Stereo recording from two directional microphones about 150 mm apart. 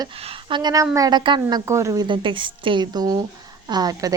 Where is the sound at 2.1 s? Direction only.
35° right (ahead or behind).